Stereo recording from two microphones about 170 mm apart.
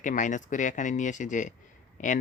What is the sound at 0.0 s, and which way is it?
Speech, 45° left (ahead or behind).